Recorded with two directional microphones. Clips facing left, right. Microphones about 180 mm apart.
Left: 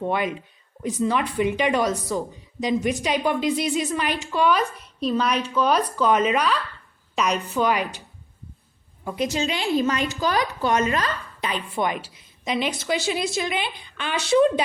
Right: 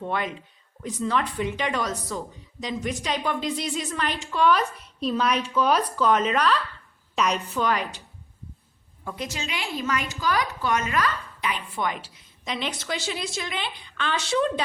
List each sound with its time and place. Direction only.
0.1 s speech: 10° left (ahead or behind)
9.0 s speech: 15° left (ahead or behind)
9.3 s a woman's voice: 30° left (ahead or behind)
11.8 s speech: 15° left (ahead or behind)